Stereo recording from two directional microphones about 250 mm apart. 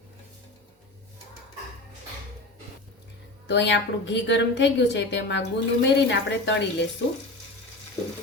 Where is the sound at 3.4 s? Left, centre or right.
Left.